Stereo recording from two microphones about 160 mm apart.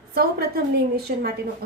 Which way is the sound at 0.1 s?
75° right (ahead or behind).